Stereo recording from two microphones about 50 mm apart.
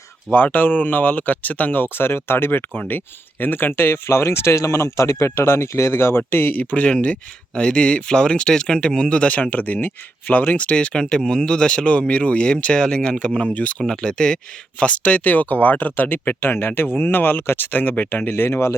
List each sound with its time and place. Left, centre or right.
0.3 s speech: left
6.5 s speech: left
13.8 s speech: centre
14.8 s speech: left
17.7 s speech: left
18.3 s speech: left